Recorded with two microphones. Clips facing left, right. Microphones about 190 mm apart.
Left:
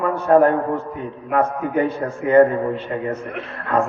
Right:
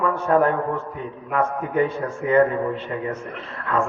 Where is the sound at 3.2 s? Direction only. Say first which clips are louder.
Left 4 dB; 60° left (ahead or behind).